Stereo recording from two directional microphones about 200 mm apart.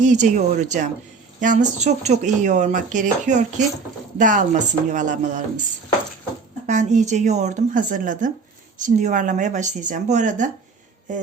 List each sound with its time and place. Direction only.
0.0 s speech: 40° right (ahead or behind)
6.7 s speech: 35° right (ahead or behind)
11.1 s a sound: 40° right (ahead or behind)